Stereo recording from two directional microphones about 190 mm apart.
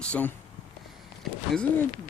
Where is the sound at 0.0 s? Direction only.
5° left (ahead or behind).